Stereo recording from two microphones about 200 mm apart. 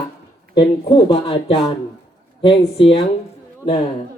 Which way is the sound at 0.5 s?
25° left (ahead or behind).